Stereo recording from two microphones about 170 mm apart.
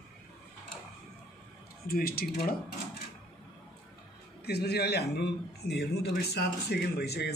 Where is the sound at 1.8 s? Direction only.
60° left (ahead or behind).